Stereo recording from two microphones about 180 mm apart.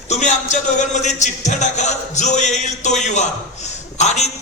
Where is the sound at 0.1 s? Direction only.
40° left (ahead or behind).